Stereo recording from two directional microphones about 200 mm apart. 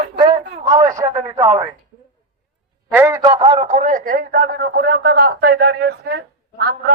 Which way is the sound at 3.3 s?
30° right (ahead or behind).